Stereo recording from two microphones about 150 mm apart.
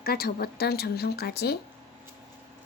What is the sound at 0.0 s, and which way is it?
Speech, 90° left.